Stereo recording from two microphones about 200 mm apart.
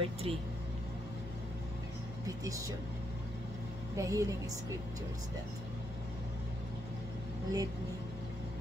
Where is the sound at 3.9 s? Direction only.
15° right (ahead or behind).